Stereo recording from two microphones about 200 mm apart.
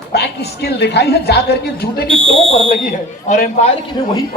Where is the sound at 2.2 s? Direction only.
25° right (ahead or behind).